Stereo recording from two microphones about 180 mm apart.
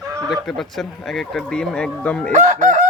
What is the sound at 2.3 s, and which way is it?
Chicken, 45° right (ahead or behind).